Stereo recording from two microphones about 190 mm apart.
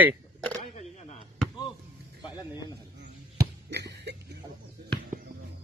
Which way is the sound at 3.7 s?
60° right (ahead or behind).